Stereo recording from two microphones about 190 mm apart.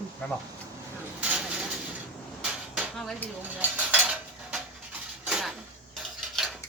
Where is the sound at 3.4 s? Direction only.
10° right (ahead or behind).